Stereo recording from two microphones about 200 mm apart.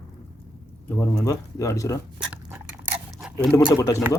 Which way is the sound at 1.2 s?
15° left (ahead or behind).